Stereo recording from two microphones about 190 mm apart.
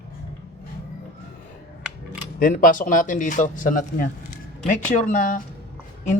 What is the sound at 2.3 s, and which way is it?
A woman's voice, 45° left (ahead or behind).